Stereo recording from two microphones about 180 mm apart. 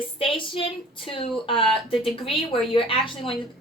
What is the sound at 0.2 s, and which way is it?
A woman's voice, 30° left (ahead or behind).